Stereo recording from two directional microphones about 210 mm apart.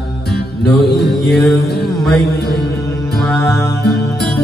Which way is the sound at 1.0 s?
Centre (ahead or behind).